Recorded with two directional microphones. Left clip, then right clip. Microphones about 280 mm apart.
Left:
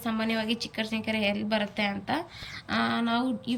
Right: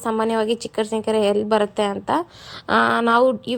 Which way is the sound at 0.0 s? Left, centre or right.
Centre.